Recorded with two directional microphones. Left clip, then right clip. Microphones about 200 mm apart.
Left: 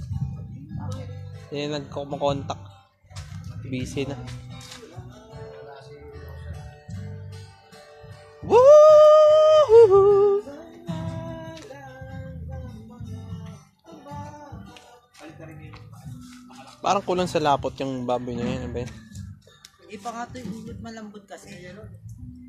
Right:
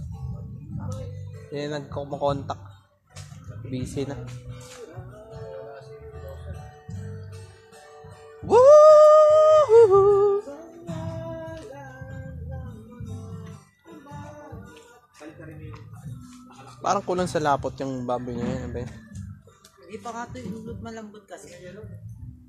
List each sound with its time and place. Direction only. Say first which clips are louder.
1.5 s speech: left 1 dB; centre (ahead or behind)
3.7 s speech: left 1 dB; centre (ahead or behind)
8.4 s music: even; centre (ahead or behind)
16.8 s a man's voice: left 2 dB; 5° left (ahead or behind)
19.9 s speech: left 1 dB; 25° left (ahead or behind)